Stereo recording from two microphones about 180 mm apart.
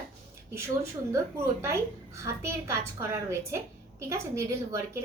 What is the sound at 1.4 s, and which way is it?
A woman's voice, 15° right (ahead or behind).